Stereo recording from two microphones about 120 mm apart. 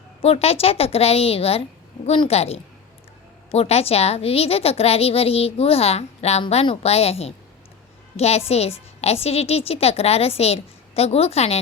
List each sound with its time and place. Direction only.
0.2 s a woman's voice: 55° left (ahead or behind)